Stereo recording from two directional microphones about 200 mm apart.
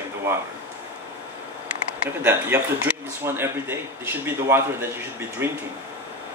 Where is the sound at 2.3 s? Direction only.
10° right (ahead or behind).